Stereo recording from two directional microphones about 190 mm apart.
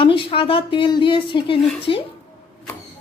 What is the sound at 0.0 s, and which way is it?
A woman's voice, 30° left (ahead or behind).